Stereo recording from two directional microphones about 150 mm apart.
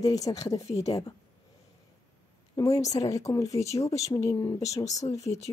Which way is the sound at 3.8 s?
20° left (ahead or behind).